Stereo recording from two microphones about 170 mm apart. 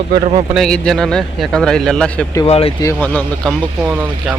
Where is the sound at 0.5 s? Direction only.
5° left (ahead or behind).